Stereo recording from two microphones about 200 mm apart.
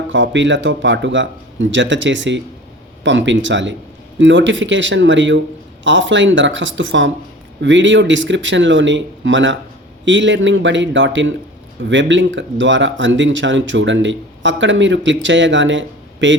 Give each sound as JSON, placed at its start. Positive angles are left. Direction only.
{"t": 0.1, "sound": "speech", "side_deg": -65}